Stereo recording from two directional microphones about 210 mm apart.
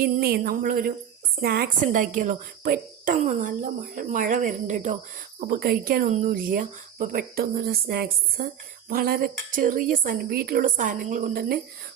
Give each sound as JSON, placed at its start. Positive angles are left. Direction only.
{"t": 0.0, "sound": "a woman's voice", "side_deg": -45}